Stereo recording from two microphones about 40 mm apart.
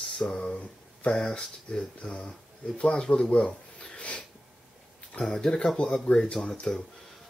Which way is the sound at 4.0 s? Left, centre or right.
Left.